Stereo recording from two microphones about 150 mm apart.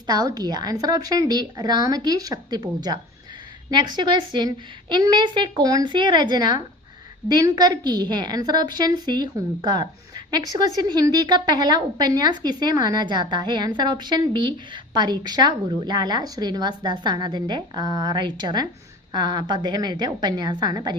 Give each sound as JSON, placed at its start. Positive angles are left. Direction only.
{"t": 0.1, "sound": "a woman's voice", "side_deg": -25}